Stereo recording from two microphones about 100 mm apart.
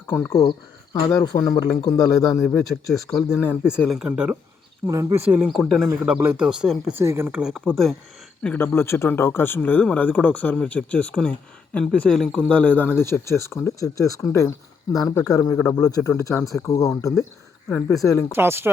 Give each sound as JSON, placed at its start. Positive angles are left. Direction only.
{"t": 0.1, "sound": "speech", "side_deg": 25}
{"t": 1.2, "sound": "speech", "side_deg": 40}
{"t": 2.1, "sound": "speech", "side_deg": 0}
{"t": 4.9, "sound": "speech", "side_deg": -30}
{"t": 5.2, "sound": "speech", "side_deg": -20}
{"t": 5.5, "sound": "speech", "side_deg": 0}
{"t": 6.9, "sound": "speech", "side_deg": -25}
{"t": 7.3, "sound": "speech", "side_deg": -5}
{"t": 7.6, "sound": "speech", "side_deg": 5}
{"t": 8.5, "sound": "speech", "side_deg": 20}
{"t": 17.7, "sound": "speech", "side_deg": 20}
{"t": 17.9, "sound": "speech", "side_deg": 30}
{"t": 18.3, "sound": "speech", "side_deg": -25}